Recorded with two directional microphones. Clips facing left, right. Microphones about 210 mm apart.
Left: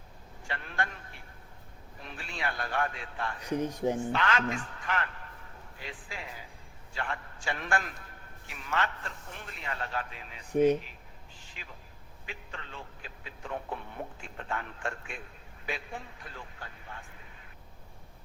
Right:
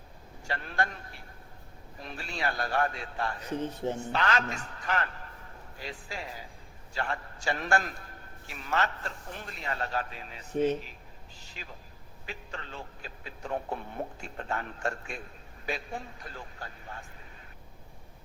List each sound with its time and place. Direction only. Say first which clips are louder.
0.4 s a sound: right 3 dB; 35° right (ahead or behind)
2.0 s a man's voice: right 3 dB; 40° right (ahead or behind)
3.4 s speech: left 5 dB; 15° left (ahead or behind)
4.1 s a man's voice: even; 40° right (ahead or behind)
10.5 s speech: left 3 dB; 10° left (ahead or behind)
11.6 s a man's voice: right 4 dB; 35° right (ahead or behind)